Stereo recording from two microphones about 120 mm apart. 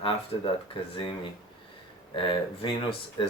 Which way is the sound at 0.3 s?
45° left (ahead or behind).